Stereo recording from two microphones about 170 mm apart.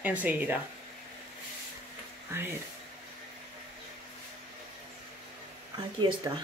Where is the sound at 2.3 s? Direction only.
15° right (ahead or behind).